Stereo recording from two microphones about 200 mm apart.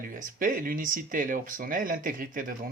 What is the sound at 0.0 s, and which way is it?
Speech, 45° right (ahead or behind).